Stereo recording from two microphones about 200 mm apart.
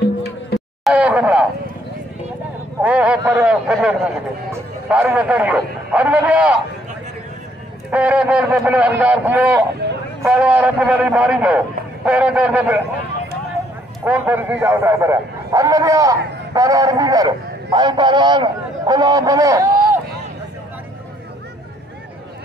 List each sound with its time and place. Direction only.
0.8 s speech: 5° right (ahead or behind)
2.8 s a man's voice: 5° right (ahead or behind)
7.9 s a man's voice: 5° right (ahead or behind)
9.8 s a sound: 55° right (ahead or behind)
10.2 s a man's voice: 5° right (ahead or behind)
14.0 s a man's voice: 10° right (ahead or behind)